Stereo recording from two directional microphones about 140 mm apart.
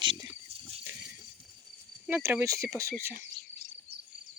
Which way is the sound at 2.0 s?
15° right (ahead or behind).